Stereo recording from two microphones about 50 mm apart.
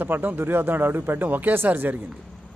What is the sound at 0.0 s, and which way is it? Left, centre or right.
Speech, right.